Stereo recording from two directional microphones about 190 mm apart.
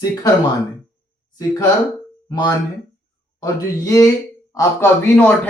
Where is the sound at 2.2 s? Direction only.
20° left (ahead or behind).